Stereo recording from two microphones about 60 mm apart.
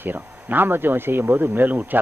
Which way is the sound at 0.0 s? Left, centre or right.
Right.